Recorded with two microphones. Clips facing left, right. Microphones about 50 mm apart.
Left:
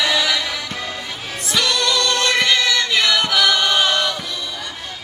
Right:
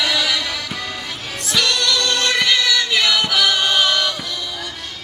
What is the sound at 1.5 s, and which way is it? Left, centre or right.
Choir, centre.